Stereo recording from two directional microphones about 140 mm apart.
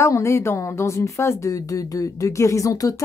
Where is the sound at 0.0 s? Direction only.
20° left (ahead or behind).